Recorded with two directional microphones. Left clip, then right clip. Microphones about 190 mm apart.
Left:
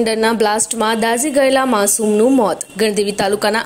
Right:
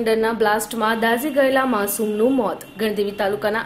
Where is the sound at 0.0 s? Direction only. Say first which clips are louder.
Left 4 dB; 40° left (ahead or behind).